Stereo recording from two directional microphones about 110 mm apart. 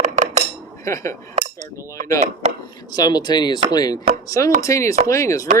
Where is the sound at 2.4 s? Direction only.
90° right.